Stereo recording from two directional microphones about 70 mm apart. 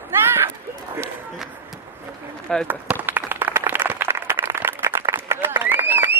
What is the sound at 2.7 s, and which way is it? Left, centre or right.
Clapping, right.